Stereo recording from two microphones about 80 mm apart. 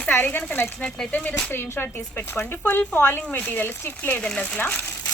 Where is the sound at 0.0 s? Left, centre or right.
Left.